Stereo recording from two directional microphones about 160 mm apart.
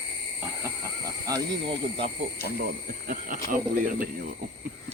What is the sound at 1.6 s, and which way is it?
Speech, 35° right (ahead or behind).